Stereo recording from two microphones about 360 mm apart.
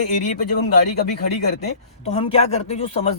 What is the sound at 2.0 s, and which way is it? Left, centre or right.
Speech, centre.